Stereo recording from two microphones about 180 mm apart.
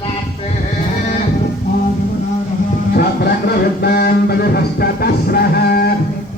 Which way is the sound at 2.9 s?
60° left (ahead or behind).